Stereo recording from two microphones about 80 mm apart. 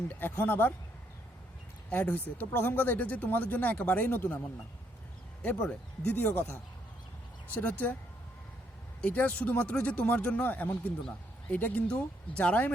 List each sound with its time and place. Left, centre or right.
0.1 s speech: left
1.9 s speech: left
9.0 s speech: centre